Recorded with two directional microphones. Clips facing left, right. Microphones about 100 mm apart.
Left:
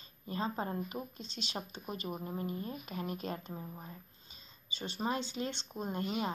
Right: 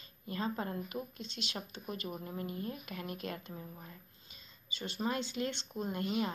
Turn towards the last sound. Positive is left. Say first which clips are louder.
# right 1 dB
turn(degrees=25)  # may be behind; listen again after turning